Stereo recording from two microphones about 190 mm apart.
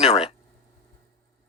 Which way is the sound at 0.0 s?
35° left (ahead or behind).